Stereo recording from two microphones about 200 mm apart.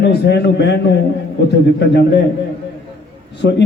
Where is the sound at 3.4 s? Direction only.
55° left (ahead or behind).